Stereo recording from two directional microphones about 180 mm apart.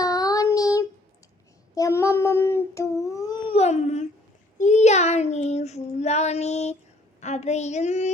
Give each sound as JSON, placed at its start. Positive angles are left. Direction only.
{"t": 0.0, "sound": "child singing", "side_deg": 20}
{"t": 1.7, "sound": "a sound", "side_deg": 15}
{"t": 3.5, "sound": "babbling", "side_deg": 35}
{"t": 4.5, "sound": "child singing", "side_deg": 40}